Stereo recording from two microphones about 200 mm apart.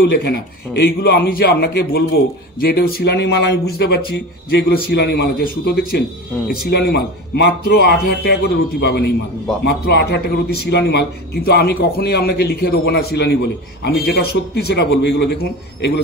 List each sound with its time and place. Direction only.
0.0 s a man's voice: 55° left (ahead or behind)